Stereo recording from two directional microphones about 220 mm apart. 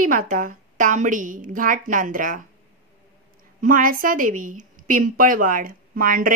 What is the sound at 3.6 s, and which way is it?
A woman's voice, 40° right (ahead or behind).